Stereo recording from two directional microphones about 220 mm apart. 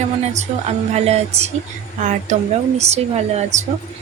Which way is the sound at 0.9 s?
30° right (ahead or behind).